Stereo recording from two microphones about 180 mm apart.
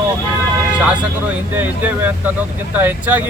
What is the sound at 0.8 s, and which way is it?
Speech, 5° right (ahead or behind).